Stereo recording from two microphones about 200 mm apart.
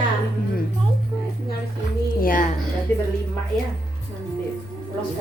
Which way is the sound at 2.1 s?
45° left (ahead or behind).